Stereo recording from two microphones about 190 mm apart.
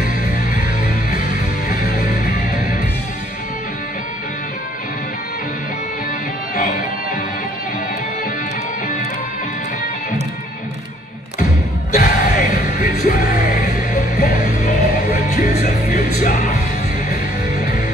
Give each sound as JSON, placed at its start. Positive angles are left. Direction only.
{"t": 1.7, "sound": "music", "side_deg": 50}
{"t": 11.9, "sound": "music", "side_deg": 45}